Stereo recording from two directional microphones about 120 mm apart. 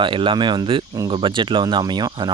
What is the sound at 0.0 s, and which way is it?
Speech, 45° right (ahead or behind).